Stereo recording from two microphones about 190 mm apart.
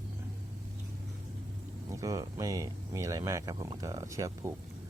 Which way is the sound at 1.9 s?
15° right (ahead or behind).